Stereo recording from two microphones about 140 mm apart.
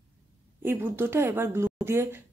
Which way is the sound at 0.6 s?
15° right (ahead or behind).